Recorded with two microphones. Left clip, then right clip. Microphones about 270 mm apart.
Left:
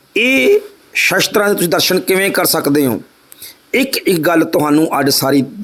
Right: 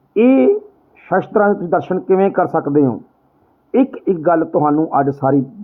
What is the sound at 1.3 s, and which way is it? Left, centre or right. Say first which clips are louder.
Speech: left 1 dB; left.